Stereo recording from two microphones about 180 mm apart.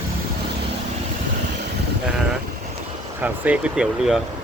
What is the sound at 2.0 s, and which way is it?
Speech, 5° right (ahead or behind).